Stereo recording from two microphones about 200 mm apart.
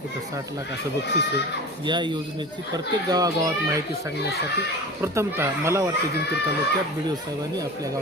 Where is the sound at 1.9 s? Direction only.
25° right (ahead or behind).